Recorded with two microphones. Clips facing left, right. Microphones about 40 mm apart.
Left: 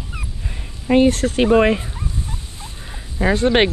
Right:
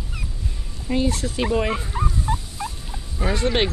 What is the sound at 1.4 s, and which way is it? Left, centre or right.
Speech, left.